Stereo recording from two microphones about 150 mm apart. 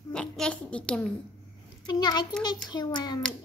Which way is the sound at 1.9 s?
25° left (ahead or behind).